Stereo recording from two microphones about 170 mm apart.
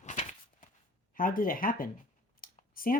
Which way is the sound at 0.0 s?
45° left (ahead or behind).